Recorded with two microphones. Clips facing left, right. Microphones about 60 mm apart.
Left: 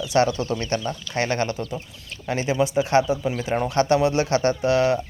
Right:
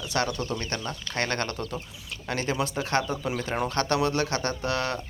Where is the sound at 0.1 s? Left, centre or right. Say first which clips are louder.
Left 8 dB; left.